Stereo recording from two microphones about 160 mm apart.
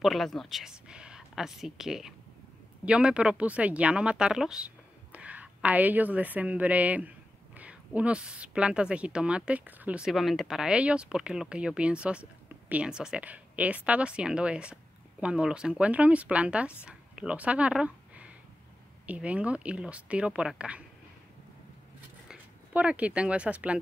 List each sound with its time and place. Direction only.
0.0 s speech: centre (ahead or behind)
22.3 s speech: 10° right (ahead or behind)